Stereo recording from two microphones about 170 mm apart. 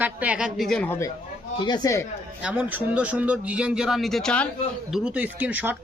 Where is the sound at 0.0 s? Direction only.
10° right (ahead or behind); by 1.1 s 15° left (ahead or behind).